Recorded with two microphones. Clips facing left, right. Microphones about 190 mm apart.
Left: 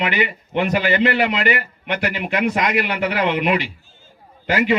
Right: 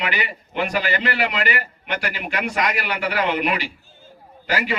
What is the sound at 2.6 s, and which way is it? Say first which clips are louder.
Speech: left 4 dB; 45° right (ahead or behind).